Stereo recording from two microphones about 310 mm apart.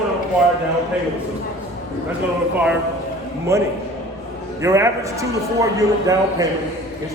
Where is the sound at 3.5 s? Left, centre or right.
Centre.